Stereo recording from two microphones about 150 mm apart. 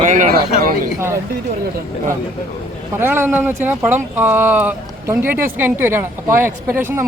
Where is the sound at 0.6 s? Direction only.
70° right (ahead or behind).